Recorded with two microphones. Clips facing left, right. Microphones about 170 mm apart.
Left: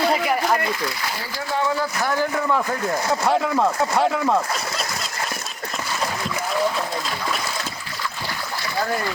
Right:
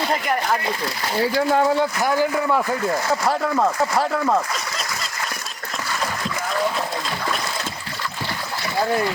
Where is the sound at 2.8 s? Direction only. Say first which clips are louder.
Right 1 dB; centre (ahead or behind).